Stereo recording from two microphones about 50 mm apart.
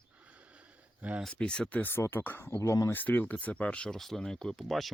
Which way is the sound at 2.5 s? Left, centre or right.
Left.